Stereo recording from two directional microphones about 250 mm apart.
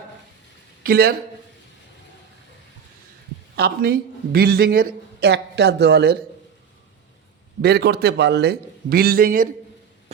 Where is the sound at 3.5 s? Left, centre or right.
Right.